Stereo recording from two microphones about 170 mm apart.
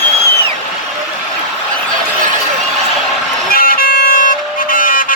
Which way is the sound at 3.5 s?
60° left (ahead or behind).